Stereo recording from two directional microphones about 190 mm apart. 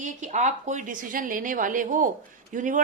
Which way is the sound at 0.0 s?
40° right (ahead or behind).